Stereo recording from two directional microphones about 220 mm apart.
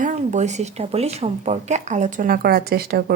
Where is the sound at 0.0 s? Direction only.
35° right (ahead or behind).